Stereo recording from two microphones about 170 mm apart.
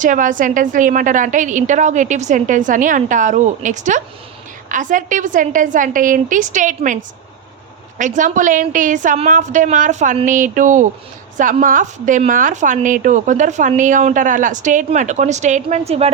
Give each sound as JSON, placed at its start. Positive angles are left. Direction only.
{"t": 0.0, "sound": "a woman's voice", "side_deg": -50}